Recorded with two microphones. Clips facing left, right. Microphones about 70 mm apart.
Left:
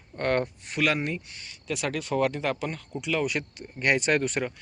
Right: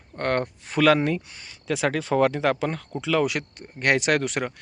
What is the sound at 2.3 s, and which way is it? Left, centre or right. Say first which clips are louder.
Speech: right 6 dB; right.